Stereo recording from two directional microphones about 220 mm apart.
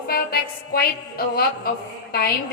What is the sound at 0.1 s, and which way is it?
Music, 45° left (ahead or behind).